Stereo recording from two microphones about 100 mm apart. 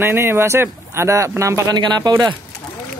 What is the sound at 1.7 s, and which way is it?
Speech, 45° right (ahead or behind).